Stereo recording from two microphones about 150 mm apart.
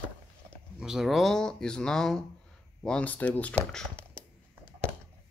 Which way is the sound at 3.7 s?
5° left (ahead or behind).